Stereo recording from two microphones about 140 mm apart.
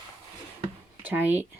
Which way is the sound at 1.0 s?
15° right (ahead or behind).